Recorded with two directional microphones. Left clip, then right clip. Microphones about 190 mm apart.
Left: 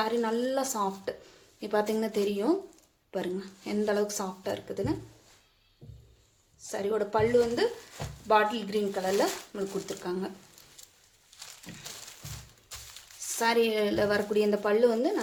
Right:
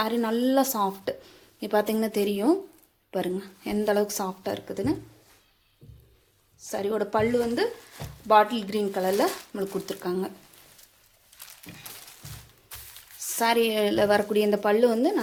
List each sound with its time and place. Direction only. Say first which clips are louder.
0.0 s speech: right 2 dB; 40° right (ahead or behind)
6.6 s speech: right 2 dB; 35° right (ahead or behind)
11.4 s a sound: left 1 dB; 10° right (ahead or behind)
13.4 s speech: right 3 dB; 35° right (ahead or behind)